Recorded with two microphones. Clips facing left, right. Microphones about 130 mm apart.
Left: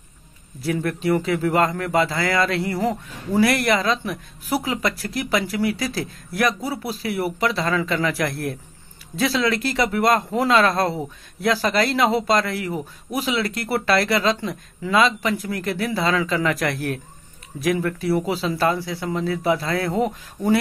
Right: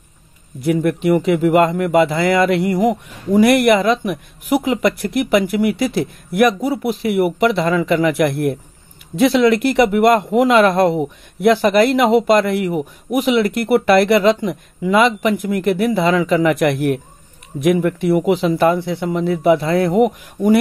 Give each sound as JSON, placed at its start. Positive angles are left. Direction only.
{"t": 0.6, "sound": "speech", "side_deg": -20}